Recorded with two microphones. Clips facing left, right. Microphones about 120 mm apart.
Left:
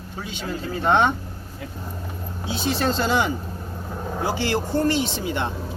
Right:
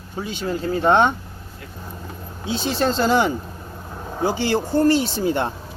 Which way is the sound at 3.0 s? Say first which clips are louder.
Right 6 dB; 40° right (ahead or behind).